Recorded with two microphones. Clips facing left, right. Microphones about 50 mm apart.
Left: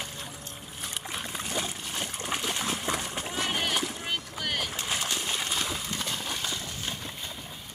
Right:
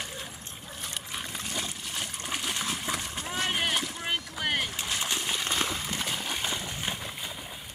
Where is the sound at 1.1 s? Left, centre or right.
Centre.